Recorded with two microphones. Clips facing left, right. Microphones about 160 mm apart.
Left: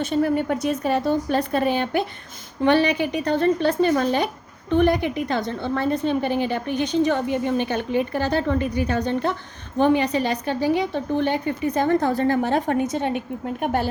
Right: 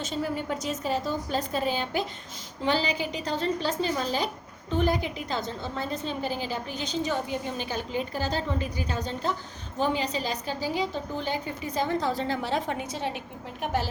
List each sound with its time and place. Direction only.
0.0 s a woman's voice: 60° left (ahead or behind)